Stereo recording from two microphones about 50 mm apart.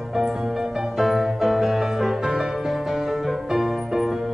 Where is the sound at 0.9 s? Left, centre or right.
Centre.